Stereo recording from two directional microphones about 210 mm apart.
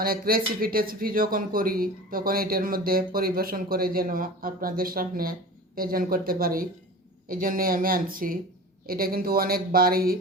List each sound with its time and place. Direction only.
0.0 s speech: 45° right (ahead or behind)